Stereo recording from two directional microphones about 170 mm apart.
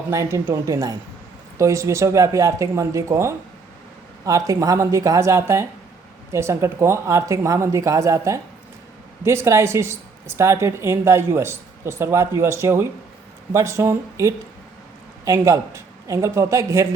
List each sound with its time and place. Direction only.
0.1 s a woman's voice: 15° right (ahead or behind)